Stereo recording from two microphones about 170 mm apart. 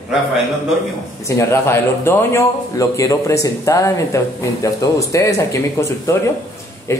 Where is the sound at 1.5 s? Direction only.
15° left (ahead or behind).